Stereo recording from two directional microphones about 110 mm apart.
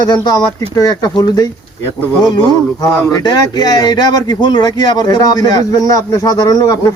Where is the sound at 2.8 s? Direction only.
35° left (ahead or behind).